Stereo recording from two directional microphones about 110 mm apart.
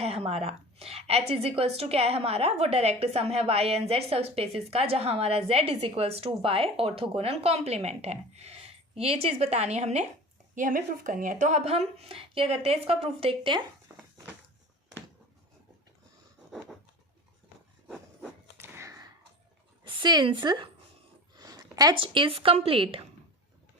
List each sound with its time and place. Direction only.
0.0 s a woman's voice: 65° right (ahead or behind); by 10.1 s 90° right
11.4 s a woman's voice: 80° right; by 13.6 s 55° right (ahead or behind)
17.8 s a sound: 10° right (ahead or behind)
18.5 s whip: 25° right (ahead or behind)
19.8 s a woman's voice: 45° right (ahead or behind)
21.4 s a sound: 35° right (ahead or behind)
21.9 s a woman's voice: 50° right (ahead or behind)